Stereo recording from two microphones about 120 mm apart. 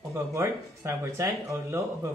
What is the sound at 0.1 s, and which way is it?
Speech, 25° right (ahead or behind).